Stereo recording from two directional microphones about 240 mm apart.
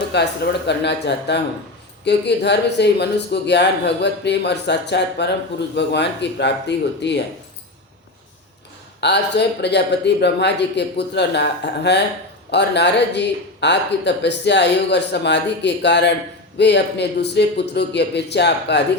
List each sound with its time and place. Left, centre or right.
0.1 s speech: left
9.0 s speech: left